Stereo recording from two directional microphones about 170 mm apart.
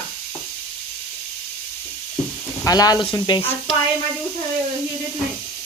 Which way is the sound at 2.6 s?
20° left (ahead or behind).